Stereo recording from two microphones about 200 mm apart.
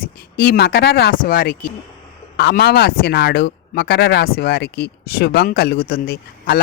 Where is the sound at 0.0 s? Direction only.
50° left (ahead or behind).